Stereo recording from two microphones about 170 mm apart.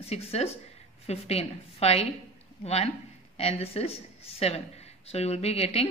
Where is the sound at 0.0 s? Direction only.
35° left (ahead or behind).